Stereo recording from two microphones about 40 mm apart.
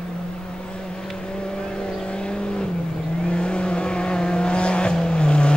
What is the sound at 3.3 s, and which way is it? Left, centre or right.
Vehicle, left.